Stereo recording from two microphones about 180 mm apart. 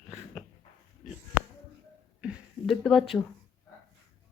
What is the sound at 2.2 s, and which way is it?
Speech, 5° right (ahead or behind).